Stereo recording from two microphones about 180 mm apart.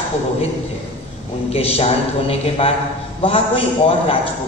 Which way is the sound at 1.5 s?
35° left (ahead or behind).